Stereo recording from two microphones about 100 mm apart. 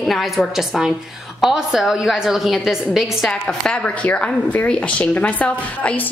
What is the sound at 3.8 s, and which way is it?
Speech, 15° left (ahead or behind).